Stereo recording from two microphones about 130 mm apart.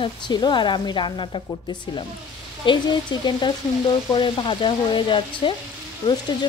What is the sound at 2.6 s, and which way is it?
Speech, 35° left (ahead or behind).